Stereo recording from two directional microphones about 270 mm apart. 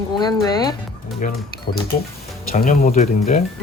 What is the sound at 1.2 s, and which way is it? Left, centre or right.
Speech, left.